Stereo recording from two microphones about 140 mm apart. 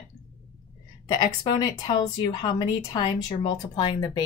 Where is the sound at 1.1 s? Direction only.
30° left (ahead or behind).